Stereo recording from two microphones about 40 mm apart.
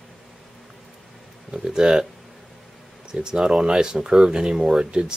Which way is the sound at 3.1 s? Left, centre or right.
Centre.